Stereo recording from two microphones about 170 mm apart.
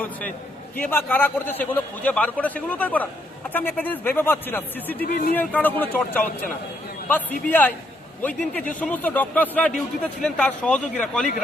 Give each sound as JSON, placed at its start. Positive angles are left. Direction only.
{"t": 0.8, "sound": "a man's voice", "side_deg": 10}
{"t": 5.0, "sound": "speech", "side_deg": 70}
{"t": 5.3, "sound": "a man's voice", "side_deg": 10}